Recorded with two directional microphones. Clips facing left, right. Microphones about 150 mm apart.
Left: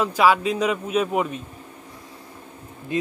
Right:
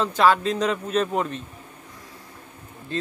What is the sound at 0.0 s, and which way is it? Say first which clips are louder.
A man's voice: left 1 dB; 10° left (ahead or behind).